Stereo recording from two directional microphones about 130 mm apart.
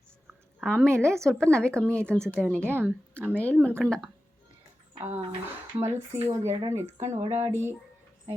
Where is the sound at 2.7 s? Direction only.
15° right (ahead or behind).